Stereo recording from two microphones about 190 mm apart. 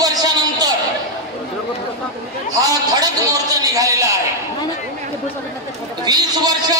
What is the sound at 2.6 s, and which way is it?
A man's voice, 20° right (ahead or behind).